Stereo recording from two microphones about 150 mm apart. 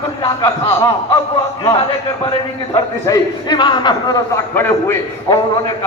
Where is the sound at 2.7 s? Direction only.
20° left (ahead or behind).